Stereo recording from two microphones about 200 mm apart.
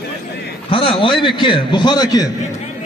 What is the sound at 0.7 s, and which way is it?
A man's voice, 25° left (ahead or behind).